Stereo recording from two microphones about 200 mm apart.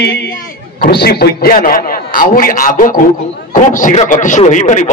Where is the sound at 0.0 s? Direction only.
55° left (ahead or behind).